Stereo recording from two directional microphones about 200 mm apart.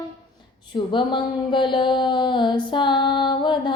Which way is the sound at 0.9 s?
25° left (ahead or behind).